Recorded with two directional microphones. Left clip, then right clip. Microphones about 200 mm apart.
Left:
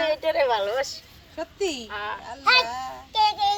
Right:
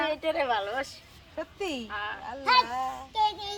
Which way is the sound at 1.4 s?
20° right (ahead or behind).